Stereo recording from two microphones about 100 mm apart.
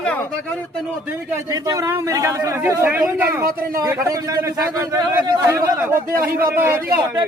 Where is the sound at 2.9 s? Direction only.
20° right (ahead or behind); by 4.1 s 35° right (ahead or behind).